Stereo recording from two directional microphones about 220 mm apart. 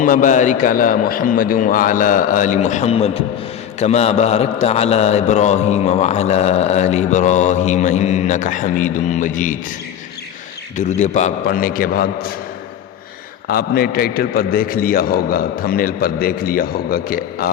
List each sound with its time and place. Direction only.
0.0 s a man's voice: 35° left (ahead or behind)
10.8 s a man's voice: 30° left (ahead or behind)
13.5 s a man's voice: 45° left (ahead or behind)